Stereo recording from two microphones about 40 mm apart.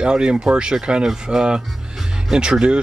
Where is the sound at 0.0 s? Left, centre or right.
Right.